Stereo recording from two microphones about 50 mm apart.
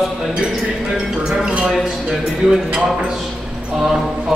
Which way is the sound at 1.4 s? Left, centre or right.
Centre.